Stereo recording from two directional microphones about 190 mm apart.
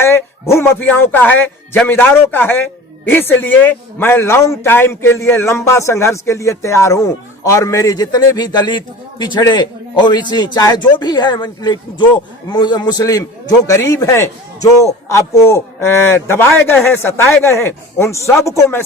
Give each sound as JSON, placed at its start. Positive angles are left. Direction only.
{"t": 0.0, "sound": "a man's voice", "side_deg": 10}